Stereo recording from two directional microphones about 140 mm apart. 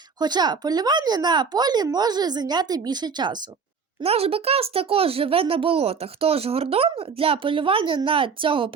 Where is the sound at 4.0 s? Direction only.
45° right (ahead or behind).